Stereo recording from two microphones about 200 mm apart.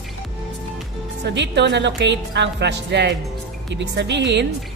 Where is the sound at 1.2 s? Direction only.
60° right (ahead or behind).